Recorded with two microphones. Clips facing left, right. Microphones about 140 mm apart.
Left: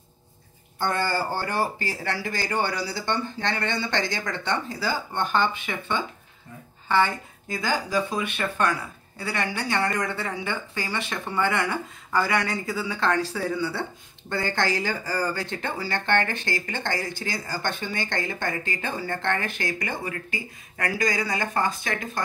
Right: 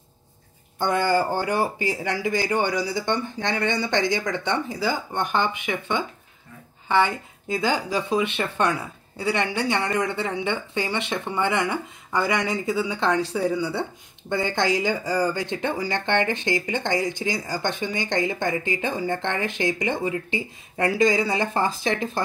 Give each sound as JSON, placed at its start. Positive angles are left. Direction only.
{"t": 0.7, "sound": "speech", "side_deg": -15}